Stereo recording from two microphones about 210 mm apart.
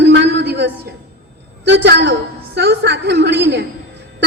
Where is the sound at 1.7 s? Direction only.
55° right (ahead or behind).